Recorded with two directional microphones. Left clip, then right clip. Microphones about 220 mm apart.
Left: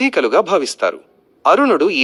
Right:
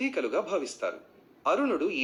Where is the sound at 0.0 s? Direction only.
45° left (ahead or behind).